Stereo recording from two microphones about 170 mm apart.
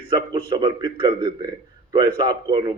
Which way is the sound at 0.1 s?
30° right (ahead or behind).